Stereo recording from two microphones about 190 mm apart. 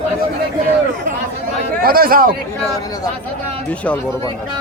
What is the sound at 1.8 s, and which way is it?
Speech, 50° right (ahead or behind).